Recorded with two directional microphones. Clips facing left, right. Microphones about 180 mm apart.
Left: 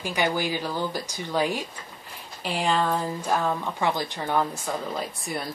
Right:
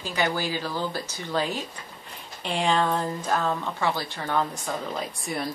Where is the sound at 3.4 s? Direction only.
15° left (ahead or behind).